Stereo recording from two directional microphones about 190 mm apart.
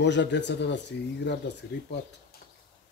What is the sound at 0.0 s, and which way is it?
Speech, 65° left (ahead or behind).